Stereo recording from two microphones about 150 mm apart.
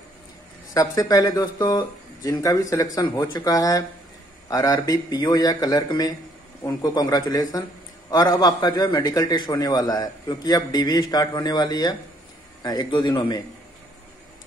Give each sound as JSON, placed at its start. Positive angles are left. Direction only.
{"t": 0.7, "sound": "a man's voice", "side_deg": 25}